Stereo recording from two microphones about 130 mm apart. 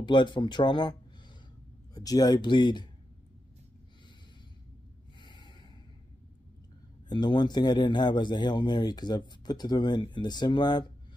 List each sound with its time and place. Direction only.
0.0 s a man's voice: 35° left (ahead or behind)
2.0 s a man's voice: 30° left (ahead or behind)
5.2 s snort: 35° left (ahead or behind)
7.1 s a man's voice: 35° left (ahead or behind)